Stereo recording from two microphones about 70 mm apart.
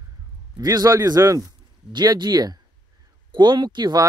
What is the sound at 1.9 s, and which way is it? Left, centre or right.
Speech, right.